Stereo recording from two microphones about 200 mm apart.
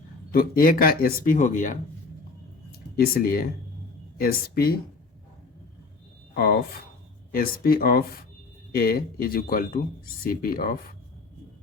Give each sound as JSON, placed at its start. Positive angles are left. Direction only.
{"t": 0.3, "sound": "speech", "side_deg": 45}
{"t": 2.9, "sound": "speech", "side_deg": 50}
{"t": 6.3, "sound": "speech", "side_deg": 50}